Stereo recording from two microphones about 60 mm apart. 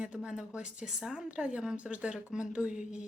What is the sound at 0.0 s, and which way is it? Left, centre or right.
A woman's voice, centre.